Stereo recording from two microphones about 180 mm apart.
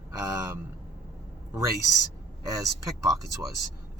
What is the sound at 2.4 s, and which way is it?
Speech, 20° right (ahead or behind).